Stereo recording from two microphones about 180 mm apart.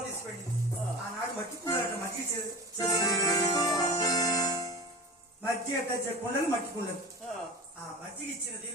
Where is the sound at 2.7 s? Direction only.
20° left (ahead or behind).